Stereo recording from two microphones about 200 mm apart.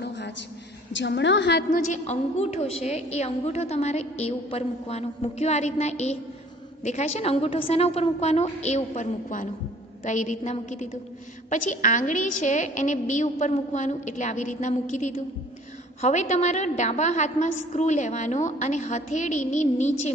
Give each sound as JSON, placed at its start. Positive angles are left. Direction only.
{"t": 0.0, "sound": "a sound", "side_deg": 60}
{"t": 0.9, "sound": "a woman's voice", "side_deg": 60}
{"t": 1.7, "sound": "a woman's voice", "side_deg": 35}